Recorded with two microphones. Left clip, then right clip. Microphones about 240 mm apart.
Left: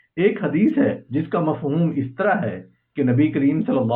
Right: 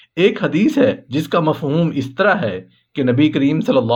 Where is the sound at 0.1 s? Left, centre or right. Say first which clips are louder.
Right 4 dB; right.